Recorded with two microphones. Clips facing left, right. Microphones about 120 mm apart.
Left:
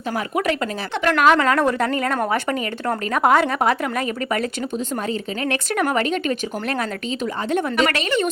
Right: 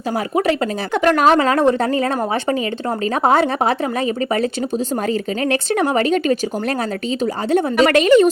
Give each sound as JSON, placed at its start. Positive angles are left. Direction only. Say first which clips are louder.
{"t": 0.3, "sound": "speech", "louder": "right 5 dB", "side_deg": -30}
{"t": 1.4, "sound": "a woman's voice", "louder": "right 3 dB", "side_deg": -25}
{"t": 7.5, "sound": "speech", "louder": "right 7 dB", "side_deg": -40}